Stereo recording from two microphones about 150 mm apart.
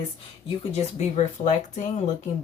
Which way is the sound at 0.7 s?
50° left (ahead or behind).